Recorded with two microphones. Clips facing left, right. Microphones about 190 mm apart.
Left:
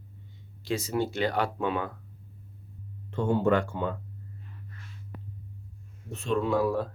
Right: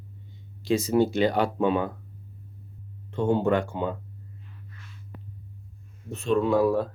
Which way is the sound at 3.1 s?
20° right (ahead or behind).